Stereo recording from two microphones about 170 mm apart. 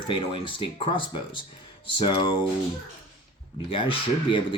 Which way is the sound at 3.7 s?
30° left (ahead or behind).